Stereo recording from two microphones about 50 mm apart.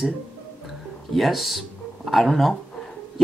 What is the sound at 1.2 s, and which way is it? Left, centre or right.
Speech, centre.